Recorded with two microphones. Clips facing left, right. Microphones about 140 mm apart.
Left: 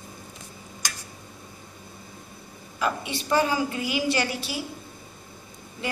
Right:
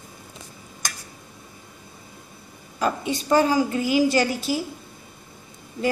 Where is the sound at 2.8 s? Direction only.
40° right (ahead or behind).